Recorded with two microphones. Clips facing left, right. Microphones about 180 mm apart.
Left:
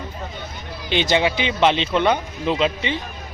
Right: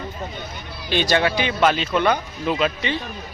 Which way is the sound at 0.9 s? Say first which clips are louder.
Left 1 dB; 20° left (ahead or behind).